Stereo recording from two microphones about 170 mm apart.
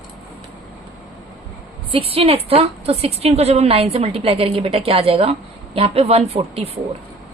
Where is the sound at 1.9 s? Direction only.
35° right (ahead or behind).